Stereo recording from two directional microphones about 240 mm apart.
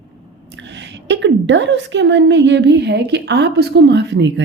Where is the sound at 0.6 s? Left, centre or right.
Right.